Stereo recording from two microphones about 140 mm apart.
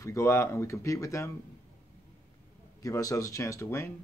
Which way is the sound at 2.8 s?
25° left (ahead or behind).